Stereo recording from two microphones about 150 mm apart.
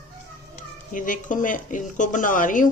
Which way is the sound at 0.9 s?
60° left (ahead or behind).